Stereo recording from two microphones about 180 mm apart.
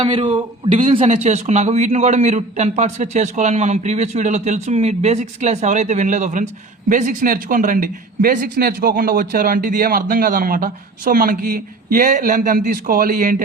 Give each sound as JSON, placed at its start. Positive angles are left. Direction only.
{"t": 0.0, "sound": "a man's voice", "side_deg": -30}